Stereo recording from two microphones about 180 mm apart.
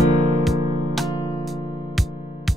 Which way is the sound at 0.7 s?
30° right (ahead or behind).